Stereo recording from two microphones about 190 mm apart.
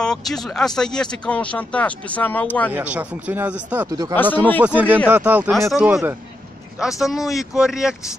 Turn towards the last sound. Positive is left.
turn(degrees=-5)  # may be behind; listen again after turning